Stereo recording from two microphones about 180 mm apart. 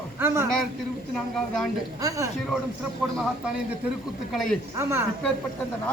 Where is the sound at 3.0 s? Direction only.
5° right (ahead or behind).